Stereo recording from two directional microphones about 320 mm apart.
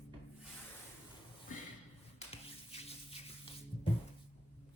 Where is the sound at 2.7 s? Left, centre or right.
Centre.